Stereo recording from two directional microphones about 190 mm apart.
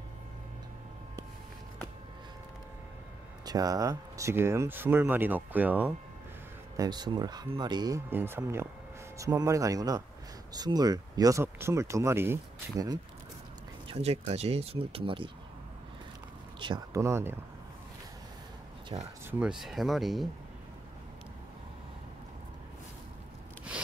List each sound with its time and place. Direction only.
3.4 s speech: 20° right (ahead or behind)
6.8 s speech: 20° right (ahead or behind)
13.8 s speech: 30° right (ahead or behind)
16.5 s speech: 25° right (ahead or behind)
18.9 s speech: 20° right (ahead or behind)
19.4 s speech: centre (ahead or behind)